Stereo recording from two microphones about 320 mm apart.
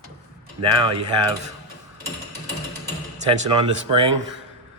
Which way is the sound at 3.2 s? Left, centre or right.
Centre.